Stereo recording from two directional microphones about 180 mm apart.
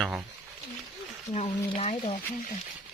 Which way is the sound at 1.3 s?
35° left (ahead or behind).